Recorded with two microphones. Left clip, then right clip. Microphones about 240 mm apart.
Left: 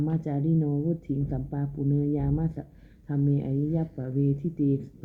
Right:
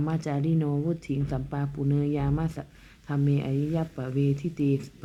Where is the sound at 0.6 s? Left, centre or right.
Right.